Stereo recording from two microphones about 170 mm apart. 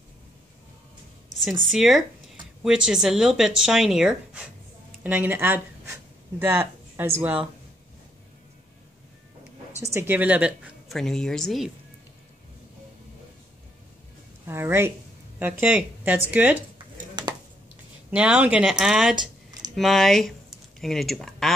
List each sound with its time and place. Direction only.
1.3 s speech: centre (ahead or behind)
9.9 s speech: 10° right (ahead or behind)
14.4 s a woman's voice: 15° right (ahead or behind)
16.7 s a sound: 25° right (ahead or behind)
18.1 s speech: 5° right (ahead or behind)